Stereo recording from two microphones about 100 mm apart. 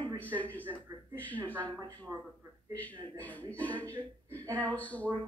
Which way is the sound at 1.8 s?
35° right (ahead or behind).